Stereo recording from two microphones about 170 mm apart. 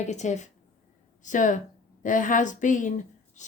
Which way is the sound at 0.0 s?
45° left (ahead or behind).